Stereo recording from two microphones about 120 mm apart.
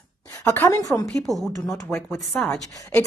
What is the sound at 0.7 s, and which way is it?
Speech, 30° left (ahead or behind).